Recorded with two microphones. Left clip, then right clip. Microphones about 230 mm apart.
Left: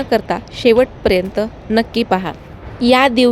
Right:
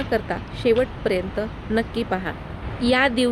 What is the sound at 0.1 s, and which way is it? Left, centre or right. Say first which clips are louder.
A woman's voice: left 9 dB; left.